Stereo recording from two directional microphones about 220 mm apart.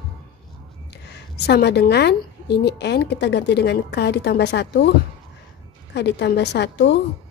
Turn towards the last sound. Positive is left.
turn(degrees=50)  # may be behind; listen again after turning